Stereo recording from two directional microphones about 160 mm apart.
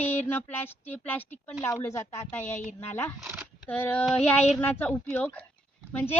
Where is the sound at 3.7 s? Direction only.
10° left (ahead or behind).